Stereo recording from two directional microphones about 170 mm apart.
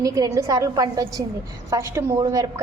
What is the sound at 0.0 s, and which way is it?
A woman's voice, 20° right (ahead or behind).